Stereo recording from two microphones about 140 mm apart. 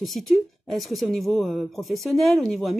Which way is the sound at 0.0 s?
Centre (ahead or behind).